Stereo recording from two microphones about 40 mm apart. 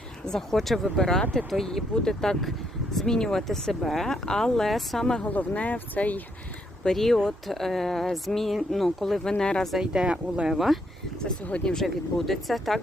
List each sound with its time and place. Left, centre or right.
0.3 s speech: centre
5.2 s speech: left
6.9 s speech: centre
9.4 s speech: centre
9.8 s speech: right
10.5 s speech: centre
11.8 s speech: centre